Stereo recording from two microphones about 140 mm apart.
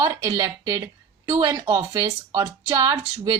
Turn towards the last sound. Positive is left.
turn(degrees=-25)  # may be behind; listen again after turning